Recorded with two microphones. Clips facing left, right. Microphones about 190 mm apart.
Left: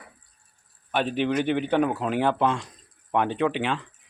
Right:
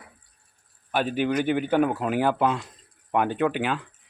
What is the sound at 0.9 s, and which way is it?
Speech, 5° right (ahead or behind).